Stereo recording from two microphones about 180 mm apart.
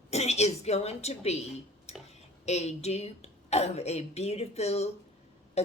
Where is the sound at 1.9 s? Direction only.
35° left (ahead or behind).